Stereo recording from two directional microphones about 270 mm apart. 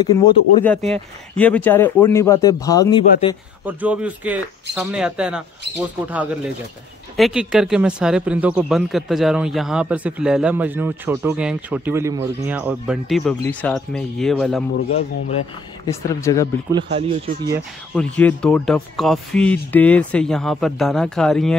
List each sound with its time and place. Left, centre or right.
0.0 s speech: centre
3.6 s speech: centre
7.2 s speech: centre
14.9 s speech: left
15.9 s speech: centre
16.7 s speech: right
17.9 s speech: centre